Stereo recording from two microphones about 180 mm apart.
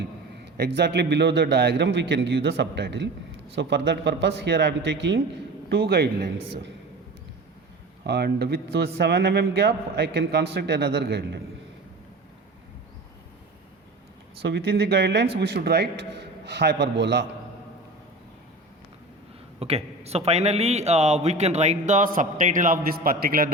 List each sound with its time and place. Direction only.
0.5 s speech: 65° right (ahead or behind); by 5.2 s 85° right
5.7 s speech: 60° right (ahead or behind)
8.0 s speech: 65° right (ahead or behind)
14.4 s speech: 65° right (ahead or behind)
19.5 s speech: 35° right (ahead or behind); by 23.5 s 55° right (ahead or behind)